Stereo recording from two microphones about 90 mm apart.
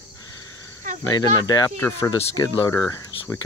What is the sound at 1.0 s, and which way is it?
Speech, 50° left (ahead or behind).